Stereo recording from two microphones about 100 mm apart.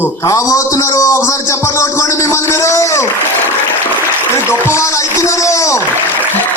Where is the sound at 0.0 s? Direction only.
35° left (ahead or behind).